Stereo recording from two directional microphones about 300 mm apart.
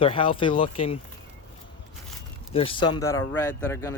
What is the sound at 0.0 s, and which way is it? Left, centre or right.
Speech, centre.